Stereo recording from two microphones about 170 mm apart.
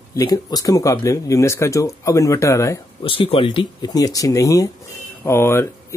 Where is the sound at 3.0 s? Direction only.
30° left (ahead or behind).